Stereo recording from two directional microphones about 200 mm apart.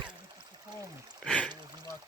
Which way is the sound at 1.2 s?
5° left (ahead or behind).